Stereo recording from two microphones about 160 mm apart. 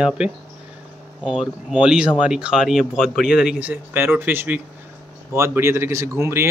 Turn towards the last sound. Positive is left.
turn(degrees=-15)  # may be behind; listen again after turning